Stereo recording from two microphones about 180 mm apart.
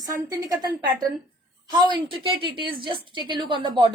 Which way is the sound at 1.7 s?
25° right (ahead or behind).